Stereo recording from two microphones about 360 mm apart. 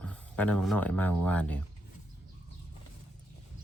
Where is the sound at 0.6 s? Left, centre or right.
Centre.